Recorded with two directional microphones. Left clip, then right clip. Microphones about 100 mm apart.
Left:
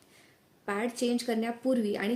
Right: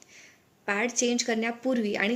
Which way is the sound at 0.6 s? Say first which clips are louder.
Right 4 dB; 45° left (ahead or behind).